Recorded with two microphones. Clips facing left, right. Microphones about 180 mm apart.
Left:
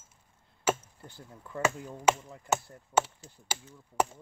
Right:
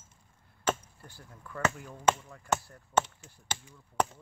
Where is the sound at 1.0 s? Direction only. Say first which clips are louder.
Left 3 dB; 20° left (ahead or behind).